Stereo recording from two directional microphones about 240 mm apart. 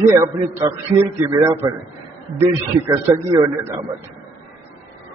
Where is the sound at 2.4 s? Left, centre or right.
Centre.